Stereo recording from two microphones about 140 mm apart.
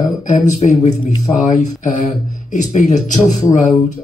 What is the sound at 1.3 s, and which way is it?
Speech, 25° left (ahead or behind).